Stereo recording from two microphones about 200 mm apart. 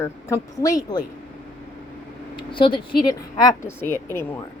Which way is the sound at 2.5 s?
25° left (ahead or behind).